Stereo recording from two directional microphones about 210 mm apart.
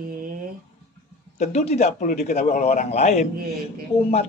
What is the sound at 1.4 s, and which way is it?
A man's voice, 30° left (ahead or behind).